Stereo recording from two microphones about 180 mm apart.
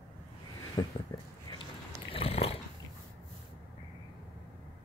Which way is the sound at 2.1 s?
35° left (ahead or behind).